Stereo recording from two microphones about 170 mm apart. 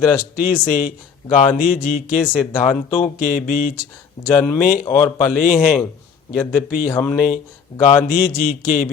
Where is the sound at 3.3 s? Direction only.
55° left (ahead or behind).